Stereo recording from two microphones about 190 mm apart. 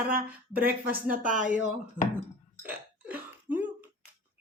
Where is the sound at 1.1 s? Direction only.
45° right (ahead or behind).